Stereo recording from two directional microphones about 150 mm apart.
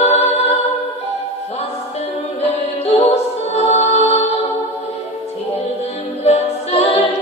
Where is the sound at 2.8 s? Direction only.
40° left (ahead or behind).